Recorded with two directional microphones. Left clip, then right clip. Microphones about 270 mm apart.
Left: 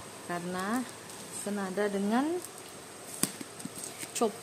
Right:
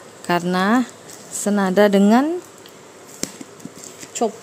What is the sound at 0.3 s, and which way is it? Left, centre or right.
Speech, right.